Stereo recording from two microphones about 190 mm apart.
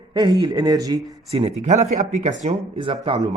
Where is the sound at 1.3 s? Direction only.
35° right (ahead or behind).